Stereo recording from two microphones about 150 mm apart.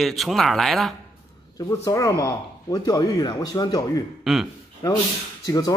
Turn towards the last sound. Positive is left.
turn(degrees=25)  # may be behind; listen again after turning